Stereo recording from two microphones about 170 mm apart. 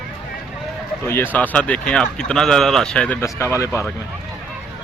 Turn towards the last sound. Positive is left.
turn(degrees=15)  # may be behind; listen again after turning